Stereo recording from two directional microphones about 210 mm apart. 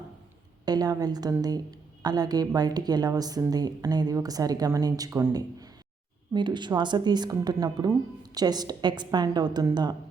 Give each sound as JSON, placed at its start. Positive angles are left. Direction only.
{"t": 0.6, "sound": "a woman's voice", "side_deg": -20}